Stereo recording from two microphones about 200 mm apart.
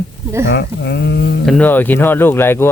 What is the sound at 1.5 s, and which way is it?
Speech, 5° left (ahead or behind).